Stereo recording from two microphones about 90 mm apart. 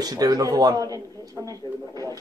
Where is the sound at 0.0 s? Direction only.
45° right (ahead or behind).